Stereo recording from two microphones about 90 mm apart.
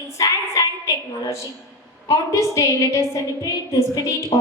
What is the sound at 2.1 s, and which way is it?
A woman's voice, 35° left (ahead or behind).